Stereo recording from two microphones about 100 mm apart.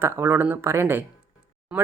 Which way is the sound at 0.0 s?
25° right (ahead or behind).